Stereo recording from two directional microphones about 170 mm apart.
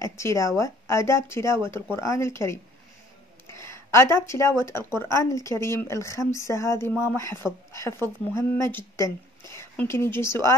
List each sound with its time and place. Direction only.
0.0 s speech: 15° left (ahead or behind)